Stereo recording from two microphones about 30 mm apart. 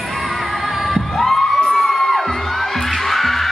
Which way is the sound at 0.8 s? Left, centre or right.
Centre.